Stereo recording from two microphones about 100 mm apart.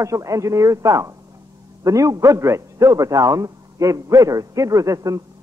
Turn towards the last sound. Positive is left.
turn(degrees=-35)  # may be behind; listen again after turning